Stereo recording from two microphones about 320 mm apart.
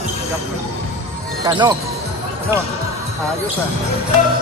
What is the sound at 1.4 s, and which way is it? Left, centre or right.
Speech, centre.